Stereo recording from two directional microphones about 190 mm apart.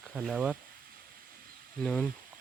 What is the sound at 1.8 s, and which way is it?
Speech, 5° left (ahead or behind).